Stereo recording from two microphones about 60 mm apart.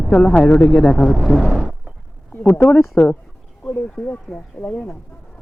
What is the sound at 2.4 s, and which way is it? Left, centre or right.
Speech, left.